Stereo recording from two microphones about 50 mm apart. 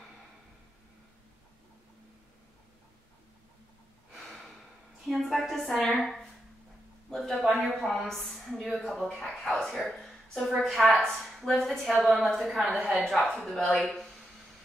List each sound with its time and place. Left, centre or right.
5.0 s a sound: centre
5.9 s a woman's voice: centre
7.1 s a sound: centre
7.8 s a woman's voice: centre
9.4 s speech: centre
9.7 s a woman's voice: centre